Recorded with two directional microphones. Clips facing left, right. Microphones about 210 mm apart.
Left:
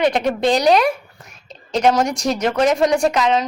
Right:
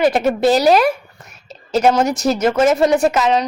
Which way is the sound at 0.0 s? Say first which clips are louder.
Right 3 dB; 5° right (ahead or behind).